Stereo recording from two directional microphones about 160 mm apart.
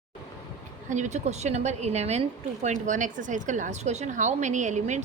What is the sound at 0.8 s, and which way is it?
A woman's voice, 50° right (ahead or behind).